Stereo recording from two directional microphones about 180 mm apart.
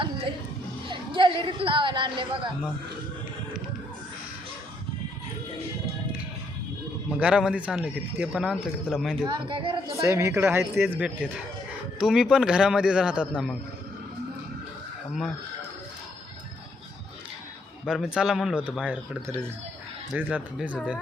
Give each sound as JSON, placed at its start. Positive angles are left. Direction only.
{"t": 0.0, "sound": "music", "side_deg": -30}
{"t": 0.9, "sound": "speech", "side_deg": -25}
{"t": 7.1, "sound": "speech", "side_deg": -5}
{"t": 9.3, "sound": "speech", "side_deg": -30}
{"t": 9.9, "sound": "speech", "side_deg": -15}
{"t": 17.8, "sound": "speech", "side_deg": -5}